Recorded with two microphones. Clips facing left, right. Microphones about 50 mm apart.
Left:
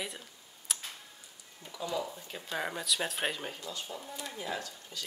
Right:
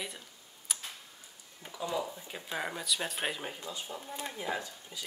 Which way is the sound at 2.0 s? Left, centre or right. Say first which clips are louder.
Even; centre.